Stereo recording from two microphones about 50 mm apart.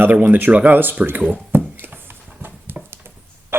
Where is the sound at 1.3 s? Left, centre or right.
Right.